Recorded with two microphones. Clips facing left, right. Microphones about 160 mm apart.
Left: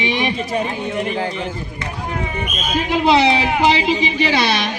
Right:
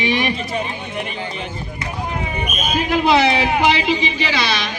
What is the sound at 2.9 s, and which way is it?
Speech, 30° left (ahead or behind).